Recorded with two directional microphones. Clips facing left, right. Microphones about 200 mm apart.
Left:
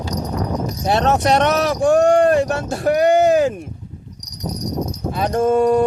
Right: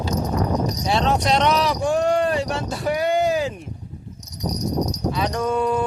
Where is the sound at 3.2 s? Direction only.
65° left (ahead or behind).